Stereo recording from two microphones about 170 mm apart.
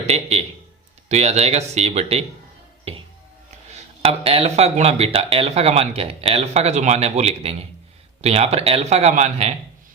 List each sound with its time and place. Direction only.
0.0 s a man's voice: 40° right (ahead or behind)
2.9 s music: 35° right (ahead or behind)
3.7 s speech: 40° right (ahead or behind)